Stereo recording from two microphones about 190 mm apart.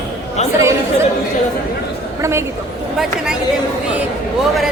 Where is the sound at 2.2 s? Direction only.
15° right (ahead or behind).